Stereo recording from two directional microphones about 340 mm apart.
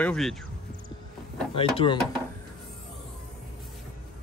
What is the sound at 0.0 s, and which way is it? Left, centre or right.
Speech, centre.